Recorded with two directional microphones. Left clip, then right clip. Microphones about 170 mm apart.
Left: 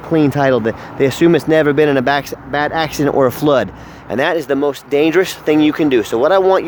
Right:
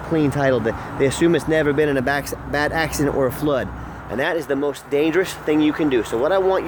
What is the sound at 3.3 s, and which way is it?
Speech, 60° left (ahead or behind).